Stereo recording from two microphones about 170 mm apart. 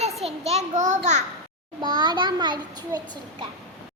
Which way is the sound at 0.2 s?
40° right (ahead or behind).